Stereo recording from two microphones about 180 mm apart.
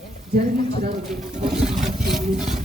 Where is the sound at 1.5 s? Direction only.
Centre (ahead or behind).